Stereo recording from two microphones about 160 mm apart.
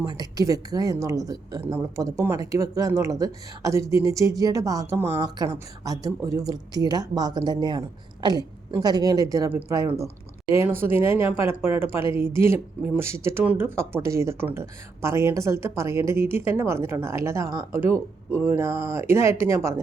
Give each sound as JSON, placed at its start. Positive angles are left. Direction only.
{"t": 0.0, "sound": "speech", "side_deg": -25}